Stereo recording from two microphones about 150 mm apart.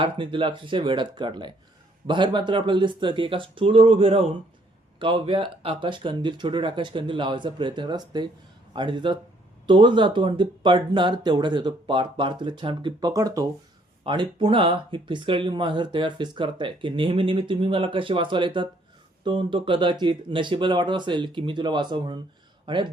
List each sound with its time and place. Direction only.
0.0 s speech: 35° right (ahead or behind)